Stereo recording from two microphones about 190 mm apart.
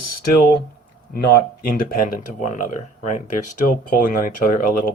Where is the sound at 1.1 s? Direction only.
55° left (ahead or behind).